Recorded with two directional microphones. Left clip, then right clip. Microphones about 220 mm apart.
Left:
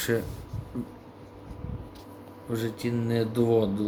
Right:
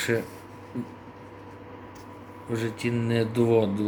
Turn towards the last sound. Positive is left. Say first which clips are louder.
# right 2 dB
turn(degrees=0)  # may be behind; listen again after turning